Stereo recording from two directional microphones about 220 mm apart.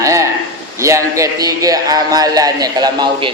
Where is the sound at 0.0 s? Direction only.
15° right (ahead or behind).